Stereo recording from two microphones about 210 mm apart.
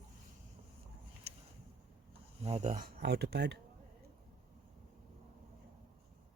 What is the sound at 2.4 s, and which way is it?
Speech, 30° right (ahead or behind).